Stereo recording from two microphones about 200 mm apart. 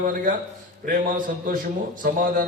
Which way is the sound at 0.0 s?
40° right (ahead or behind).